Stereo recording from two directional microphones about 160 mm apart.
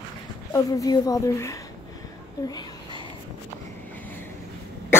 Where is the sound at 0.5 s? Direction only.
20° left (ahead or behind).